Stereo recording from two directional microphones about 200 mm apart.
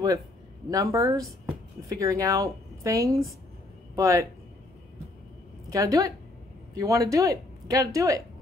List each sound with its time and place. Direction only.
0.7 s speech: 20° right (ahead or behind)
5.7 s speech: 15° right (ahead or behind)